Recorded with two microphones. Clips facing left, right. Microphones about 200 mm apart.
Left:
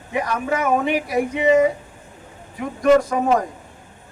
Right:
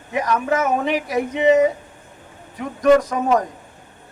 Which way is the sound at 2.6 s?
40° right (ahead or behind).